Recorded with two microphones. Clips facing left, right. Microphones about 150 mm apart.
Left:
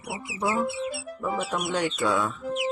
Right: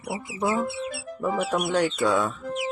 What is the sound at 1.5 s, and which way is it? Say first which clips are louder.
Speech: right 4 dB; 30° right (ahead or behind).